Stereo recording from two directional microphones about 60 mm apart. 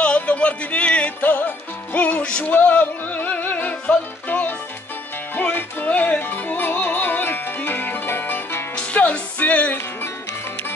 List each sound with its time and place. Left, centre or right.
0.0 s music: centre; by 8.6 s left
8.7 s music: left